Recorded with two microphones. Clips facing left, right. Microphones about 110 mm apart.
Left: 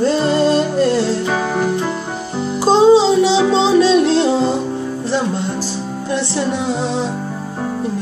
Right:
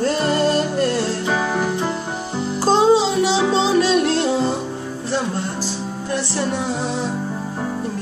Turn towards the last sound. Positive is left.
turn(degrees=25)  # may be behind; listen again after turning